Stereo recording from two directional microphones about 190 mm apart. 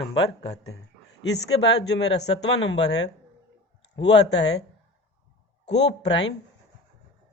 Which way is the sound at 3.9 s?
70° left (ahead or behind).